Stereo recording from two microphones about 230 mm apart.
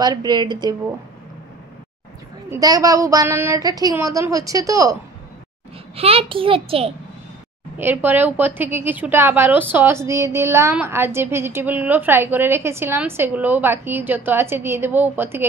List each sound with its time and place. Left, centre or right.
0.0 s a woman's voice: centre
2.5 s a woman's voice: centre
5.9 s a child's voice: right
7.7 s a woman's voice: centre